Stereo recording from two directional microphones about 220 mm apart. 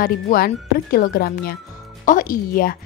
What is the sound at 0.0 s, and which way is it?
Speech, 40° left (ahead or behind).